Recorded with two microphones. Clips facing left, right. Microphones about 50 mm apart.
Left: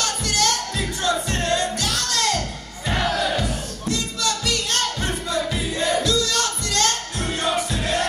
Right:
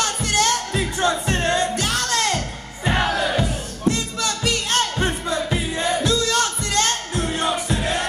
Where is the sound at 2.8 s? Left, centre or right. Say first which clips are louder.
Right 2 dB; right.